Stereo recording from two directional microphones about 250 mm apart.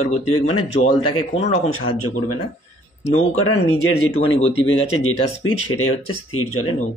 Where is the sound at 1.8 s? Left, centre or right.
Left.